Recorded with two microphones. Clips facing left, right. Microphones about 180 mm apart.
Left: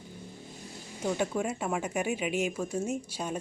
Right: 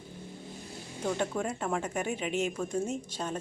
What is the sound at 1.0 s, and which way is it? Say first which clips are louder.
A woman's voice: left 1 dB; 10° left (ahead or behind).